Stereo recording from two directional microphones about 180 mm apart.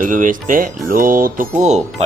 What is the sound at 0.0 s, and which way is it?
Speech, 50° right (ahead or behind).